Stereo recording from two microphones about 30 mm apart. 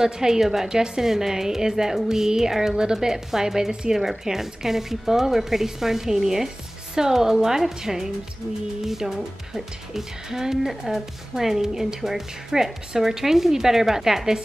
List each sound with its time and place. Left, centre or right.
0.0 s a woman's voice: centre